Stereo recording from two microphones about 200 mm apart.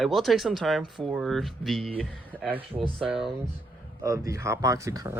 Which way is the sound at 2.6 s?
25° right (ahead or behind).